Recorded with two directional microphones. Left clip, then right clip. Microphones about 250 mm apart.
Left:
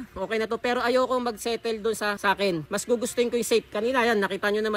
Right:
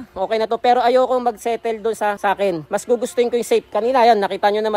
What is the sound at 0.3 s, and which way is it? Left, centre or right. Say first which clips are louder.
Speech: right 10 dB; centre.